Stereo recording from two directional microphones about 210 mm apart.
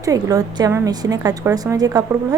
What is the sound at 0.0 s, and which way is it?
A woman's voice, 15° right (ahead or behind).